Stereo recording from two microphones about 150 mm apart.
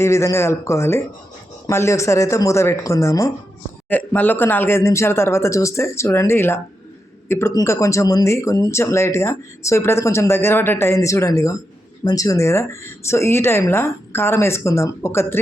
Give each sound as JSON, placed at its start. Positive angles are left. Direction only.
{"t": 0.0, "sound": "speech", "side_deg": 20}